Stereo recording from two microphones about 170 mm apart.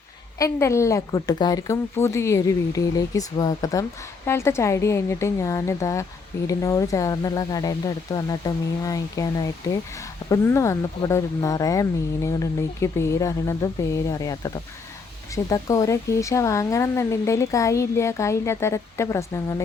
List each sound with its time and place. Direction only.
0.3 s speech: 20° left (ahead or behind)